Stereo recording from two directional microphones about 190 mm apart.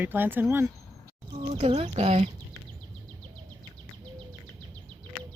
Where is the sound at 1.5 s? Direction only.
35° right (ahead or behind).